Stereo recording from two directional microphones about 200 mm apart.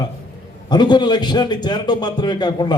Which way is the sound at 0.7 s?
20° left (ahead or behind).